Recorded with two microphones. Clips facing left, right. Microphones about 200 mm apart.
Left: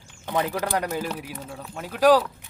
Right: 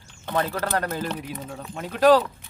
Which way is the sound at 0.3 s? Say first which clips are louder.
Even; 10° left (ahead or behind).